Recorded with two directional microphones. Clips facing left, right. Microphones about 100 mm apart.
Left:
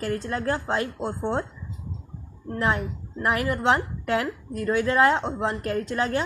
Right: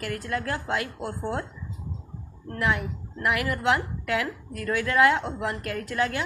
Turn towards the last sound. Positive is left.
turn(degrees=30)  # may be behind; listen again after turning